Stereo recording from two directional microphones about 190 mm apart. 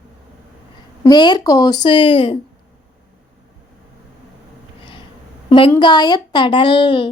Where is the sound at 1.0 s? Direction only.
20° left (ahead or behind).